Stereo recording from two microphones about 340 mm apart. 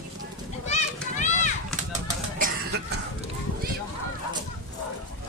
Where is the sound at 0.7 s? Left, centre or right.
Left.